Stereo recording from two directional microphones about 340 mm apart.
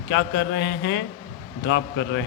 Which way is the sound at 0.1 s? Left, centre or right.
Left.